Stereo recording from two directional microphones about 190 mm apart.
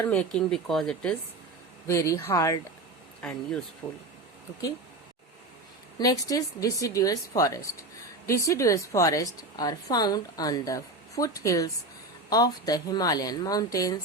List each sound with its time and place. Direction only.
0.0 s speech: 5° left (ahead or behind)
1.9 s a woman's voice: 15° left (ahead or behind)
3.2 s speech: 5° left (ahead or behind)
6.0 s a woman's voice: 20° left (ahead or behind)